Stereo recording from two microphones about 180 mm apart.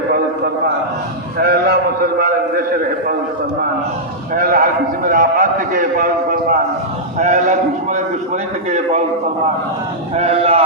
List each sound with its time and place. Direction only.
1.4 s a man's voice: 60° right (ahead or behind)
4.4 s a man's voice: 50° right (ahead or behind)
8.7 s a man's voice: 40° right (ahead or behind)
10.2 s a man's voice: 35° right (ahead or behind)